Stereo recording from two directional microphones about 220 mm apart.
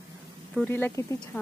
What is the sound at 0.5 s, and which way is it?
Speech, 5° left (ahead or behind).